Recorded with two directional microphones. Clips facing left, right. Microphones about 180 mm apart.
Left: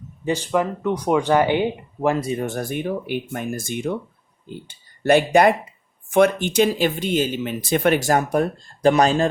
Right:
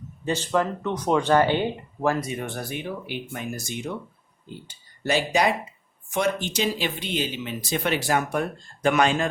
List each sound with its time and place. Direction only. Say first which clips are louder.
0.3 s speech: left 3 dB; 10° left (ahead or behind)
2.1 s speech: left 6 dB; 30° left (ahead or behind)